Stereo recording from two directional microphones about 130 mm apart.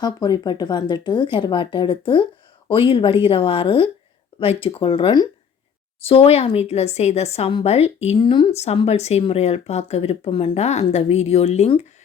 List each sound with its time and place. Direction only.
0.0 s speech: 30° left (ahead or behind)
6.1 s speech: 50° left (ahead or behind)
8.2 s speech: 40° left (ahead or behind)
8.5 s speech: 50° left (ahead or behind)